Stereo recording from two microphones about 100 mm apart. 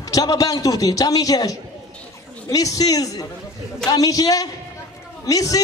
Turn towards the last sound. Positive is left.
turn(degrees=35)  # may be behind; listen again after turning